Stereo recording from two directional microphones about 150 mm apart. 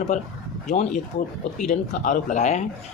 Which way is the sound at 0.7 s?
55° left (ahead or behind).